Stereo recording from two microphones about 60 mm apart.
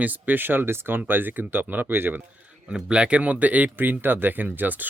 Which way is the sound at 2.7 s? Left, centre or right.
Centre.